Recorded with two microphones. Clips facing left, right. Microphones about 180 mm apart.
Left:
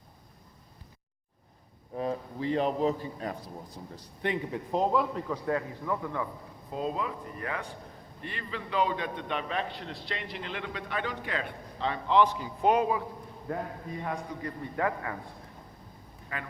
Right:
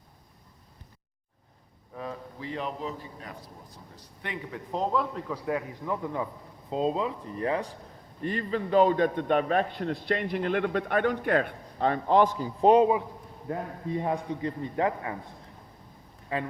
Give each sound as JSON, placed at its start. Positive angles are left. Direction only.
{"t": 2.0, "sound": "a man's voice", "side_deg": 30}
{"t": 4.7, "sound": "a man's voice", "side_deg": 10}
{"t": 5.5, "sound": "a man's voice", "side_deg": -15}
{"t": 8.2, "sound": "a man's voice", "side_deg": -40}
{"t": 12.6, "sound": "a man's voice", "side_deg": -30}
{"t": 14.0, "sound": "a man's voice", "side_deg": -25}
{"t": 16.3, "sound": "a man's voice", "side_deg": -30}